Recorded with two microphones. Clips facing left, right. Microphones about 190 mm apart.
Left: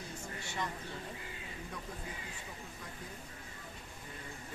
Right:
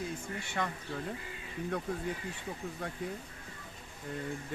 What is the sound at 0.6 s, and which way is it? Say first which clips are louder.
Speech: right 4 dB; 60° right (ahead or behind).